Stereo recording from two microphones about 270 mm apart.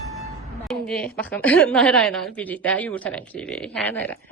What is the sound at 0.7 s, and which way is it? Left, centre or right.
A woman's voice, centre.